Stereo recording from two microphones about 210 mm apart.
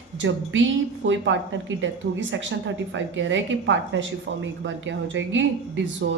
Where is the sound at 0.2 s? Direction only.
65° right (ahead or behind).